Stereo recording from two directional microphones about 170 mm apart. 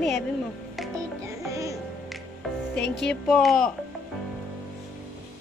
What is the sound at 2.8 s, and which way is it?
Music, 90° left.